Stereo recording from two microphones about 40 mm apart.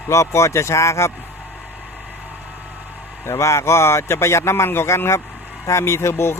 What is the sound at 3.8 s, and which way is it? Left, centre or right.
Speech, left.